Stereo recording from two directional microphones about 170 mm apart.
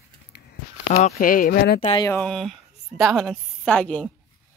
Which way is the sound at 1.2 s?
55° left (ahead or behind).